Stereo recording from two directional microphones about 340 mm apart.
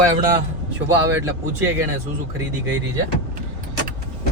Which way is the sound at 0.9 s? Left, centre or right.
Centre.